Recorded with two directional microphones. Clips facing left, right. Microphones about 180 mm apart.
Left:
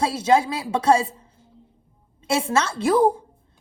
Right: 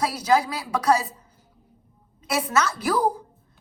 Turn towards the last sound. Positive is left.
turn(degrees=25)  # may be behind; listen again after turning